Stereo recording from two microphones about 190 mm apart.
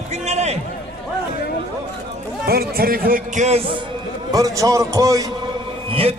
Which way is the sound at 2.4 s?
55° right (ahead or behind).